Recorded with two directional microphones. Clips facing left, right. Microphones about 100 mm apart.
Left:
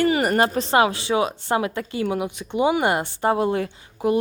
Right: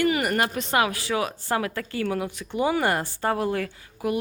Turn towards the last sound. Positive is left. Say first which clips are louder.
# left 5 dB
turn(degrees=25)  # may be behind; listen again after turning